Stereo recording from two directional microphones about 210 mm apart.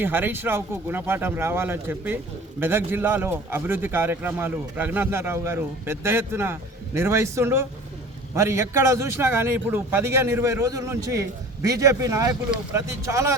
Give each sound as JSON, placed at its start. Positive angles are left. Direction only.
{"t": 0.0, "sound": "speech", "side_deg": -10}